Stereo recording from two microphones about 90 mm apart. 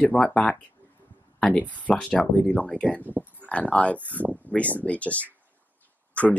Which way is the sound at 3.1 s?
20° right (ahead or behind).